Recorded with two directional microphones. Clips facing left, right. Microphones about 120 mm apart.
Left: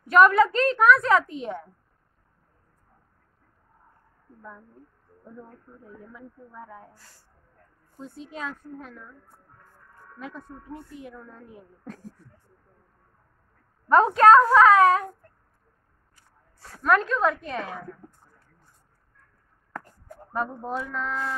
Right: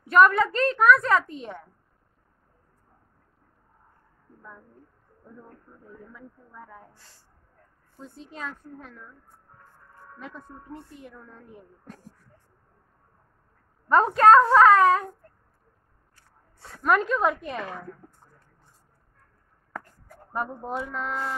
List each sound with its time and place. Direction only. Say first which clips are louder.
0.1 s a woman's voice: left 2 dB; 5° left (ahead or behind)
6.1 s speech: left 3 dB; 10° left (ahead or behind)
8.0 s a woman's voice: left 2 dB; 5° left (ahead or behind)
10.1 s a woman's voice: left 3 dB; 5° left (ahead or behind)
13.8 s a woman's voice: left 1 dB; 5° left (ahead or behind)
16.8 s a woman's voice: left 1 dB; 10° right (ahead or behind)
20.3 s a woman's voice: left 1 dB; 15° right (ahead or behind)